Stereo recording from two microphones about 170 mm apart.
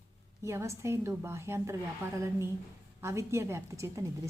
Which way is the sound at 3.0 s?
15° right (ahead or behind).